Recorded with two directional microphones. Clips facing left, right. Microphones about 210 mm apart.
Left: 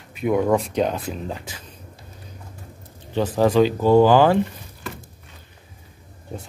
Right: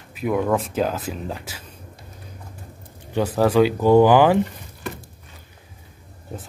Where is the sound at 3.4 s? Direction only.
10° right (ahead or behind).